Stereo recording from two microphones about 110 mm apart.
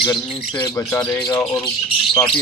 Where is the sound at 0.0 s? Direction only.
45° left (ahead or behind).